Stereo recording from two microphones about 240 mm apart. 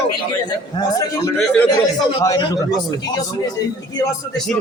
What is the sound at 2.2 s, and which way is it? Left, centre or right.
Speech, centre.